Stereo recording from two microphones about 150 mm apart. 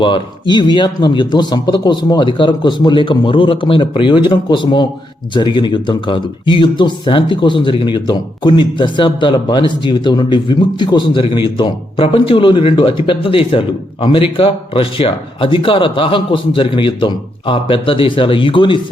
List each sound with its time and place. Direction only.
0.0 s speech: 30° left (ahead or behind)